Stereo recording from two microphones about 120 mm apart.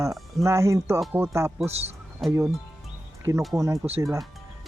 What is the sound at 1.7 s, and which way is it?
Speech, 60° right (ahead or behind).